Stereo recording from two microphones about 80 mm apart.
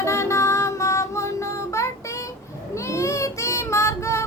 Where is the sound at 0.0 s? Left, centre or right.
Left.